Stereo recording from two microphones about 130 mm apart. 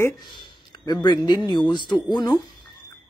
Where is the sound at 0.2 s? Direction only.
35° left (ahead or behind).